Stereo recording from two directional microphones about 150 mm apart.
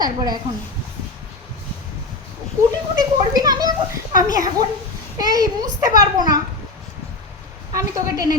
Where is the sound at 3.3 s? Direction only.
25° right (ahead or behind).